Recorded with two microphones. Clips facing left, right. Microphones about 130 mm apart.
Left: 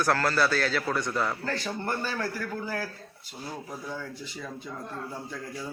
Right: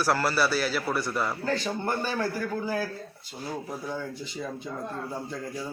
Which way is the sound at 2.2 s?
20° right (ahead or behind).